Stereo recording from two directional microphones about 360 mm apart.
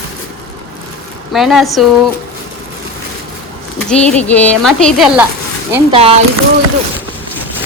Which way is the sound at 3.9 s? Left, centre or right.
Centre.